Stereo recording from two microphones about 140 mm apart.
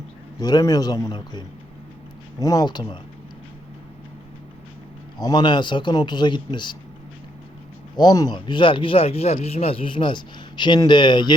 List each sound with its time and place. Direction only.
0.3 s a man's voice: 30° left (ahead or behind)
5.1 s speech: 30° left (ahead or behind)
7.9 s speech: 30° left (ahead or behind)